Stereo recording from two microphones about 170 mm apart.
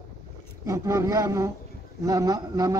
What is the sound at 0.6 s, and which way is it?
Speech, 15° right (ahead or behind).